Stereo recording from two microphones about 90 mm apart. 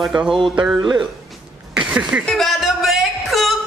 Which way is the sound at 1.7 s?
10° right (ahead or behind).